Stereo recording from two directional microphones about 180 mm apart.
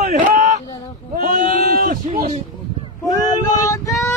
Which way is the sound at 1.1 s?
50° right (ahead or behind).